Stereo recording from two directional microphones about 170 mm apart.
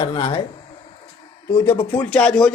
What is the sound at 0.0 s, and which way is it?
Speech, 30° left (ahead or behind).